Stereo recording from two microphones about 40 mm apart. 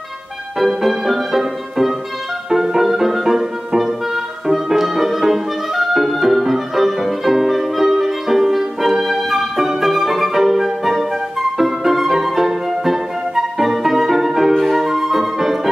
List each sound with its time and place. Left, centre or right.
0.6 s music: centre
11.5 s flute: centre
14.5 s music: centre